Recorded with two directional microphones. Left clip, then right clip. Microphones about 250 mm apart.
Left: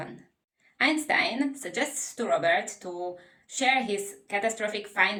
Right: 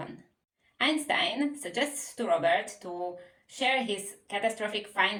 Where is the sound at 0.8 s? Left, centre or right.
Centre.